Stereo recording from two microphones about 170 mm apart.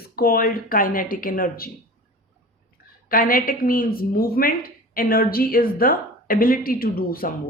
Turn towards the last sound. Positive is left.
turn(degrees=60)  # may be behind; listen again after turning